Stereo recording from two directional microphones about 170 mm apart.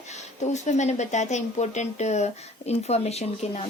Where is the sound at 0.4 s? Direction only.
45° left (ahead or behind).